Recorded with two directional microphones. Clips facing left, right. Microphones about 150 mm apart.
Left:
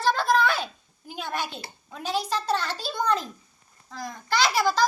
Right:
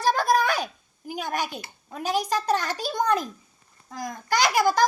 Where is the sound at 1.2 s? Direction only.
15° right (ahead or behind).